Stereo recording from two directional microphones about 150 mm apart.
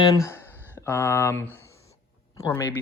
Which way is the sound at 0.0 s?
20° left (ahead or behind).